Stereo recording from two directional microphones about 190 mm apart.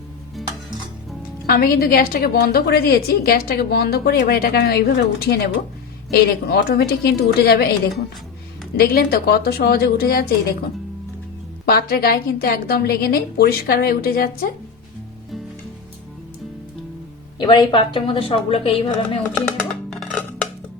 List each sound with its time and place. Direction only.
0.4 s stir: centre (ahead or behind)
1.5 s a woman's voice: 50° left (ahead or behind)
8.7 s a woman's voice: 50° left (ahead or behind)
11.7 s a woman's voice: 55° left (ahead or behind)
17.3 s a woman's voice: 20° left (ahead or behind)
19.3 s music: 5° left (ahead or behind)